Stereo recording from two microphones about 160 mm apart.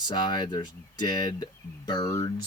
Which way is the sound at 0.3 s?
25° left (ahead or behind).